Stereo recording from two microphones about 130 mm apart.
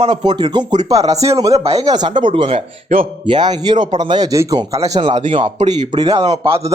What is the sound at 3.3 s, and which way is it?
A man's voice, 35° right (ahead or behind).